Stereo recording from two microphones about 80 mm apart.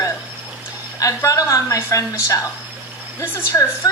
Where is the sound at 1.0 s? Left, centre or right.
Left.